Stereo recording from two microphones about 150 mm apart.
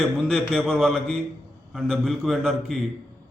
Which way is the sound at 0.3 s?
Centre (ahead or behind).